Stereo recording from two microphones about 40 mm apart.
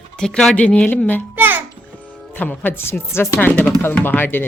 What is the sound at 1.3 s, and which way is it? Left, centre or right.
Speech, right.